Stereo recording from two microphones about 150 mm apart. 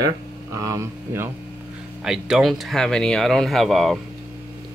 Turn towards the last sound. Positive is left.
turn(degrees=0)  # may be behind; listen again after turning